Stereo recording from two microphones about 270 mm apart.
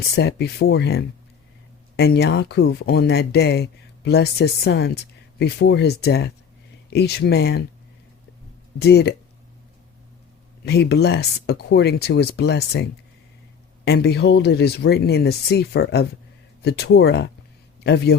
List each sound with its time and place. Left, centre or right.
0.2 s speech: left
8.8 s speech: left
10.6 s speech: left